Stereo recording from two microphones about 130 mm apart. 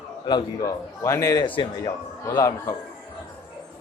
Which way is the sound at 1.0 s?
20° left (ahead or behind).